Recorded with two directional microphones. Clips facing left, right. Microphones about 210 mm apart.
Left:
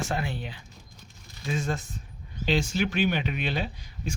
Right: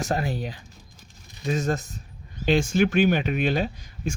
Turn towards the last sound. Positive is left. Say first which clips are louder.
# right 6 dB
turn(degrees=-45)  # may be behind; listen again after turning